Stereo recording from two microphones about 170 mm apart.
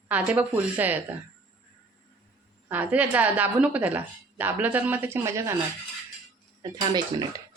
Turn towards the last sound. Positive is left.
turn(degrees=-20)  # may be behind; listen again after turning